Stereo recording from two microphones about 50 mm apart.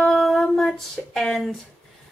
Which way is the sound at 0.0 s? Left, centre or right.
Centre.